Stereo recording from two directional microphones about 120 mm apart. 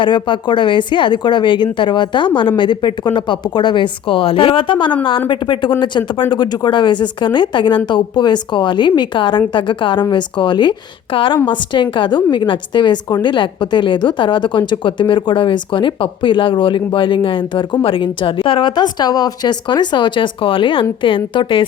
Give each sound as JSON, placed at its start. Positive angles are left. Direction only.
{"t": 0.0, "sound": "a woman's voice", "side_deg": 40}